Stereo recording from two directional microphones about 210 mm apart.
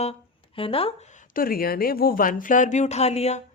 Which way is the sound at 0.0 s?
25° left (ahead or behind).